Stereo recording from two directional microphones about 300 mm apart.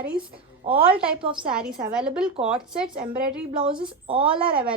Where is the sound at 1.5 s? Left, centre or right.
Centre.